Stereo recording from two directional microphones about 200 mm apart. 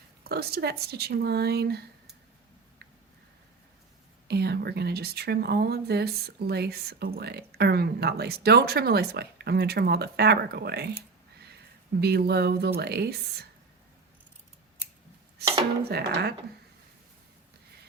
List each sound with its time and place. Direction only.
0.3 s speech: 50° right (ahead or behind)
4.3 s speech: 55° right (ahead or behind)
11.9 s speech: 55° right (ahead or behind)
15.8 s speech: 50° right (ahead or behind)